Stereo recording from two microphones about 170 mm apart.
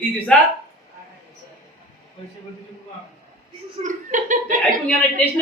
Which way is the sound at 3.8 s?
50° right (ahead or behind).